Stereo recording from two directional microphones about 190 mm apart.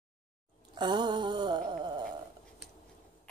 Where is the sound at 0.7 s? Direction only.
25° right (ahead or behind).